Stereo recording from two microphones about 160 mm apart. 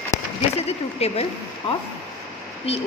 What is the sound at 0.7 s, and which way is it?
Speech, 40° left (ahead or behind).